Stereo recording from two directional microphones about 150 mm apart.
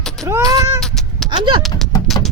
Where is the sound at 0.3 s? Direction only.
20° right (ahead or behind).